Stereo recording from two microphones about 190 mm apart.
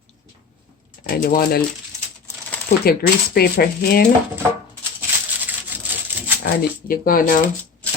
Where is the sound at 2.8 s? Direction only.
55° left (ahead or behind).